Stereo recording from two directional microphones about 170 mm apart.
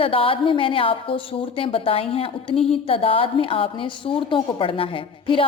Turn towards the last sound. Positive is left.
turn(degrees=30)  # may be behind; listen again after turning